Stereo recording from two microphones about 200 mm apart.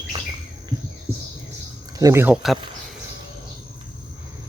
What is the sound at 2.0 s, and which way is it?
Speech, 15° right (ahead or behind).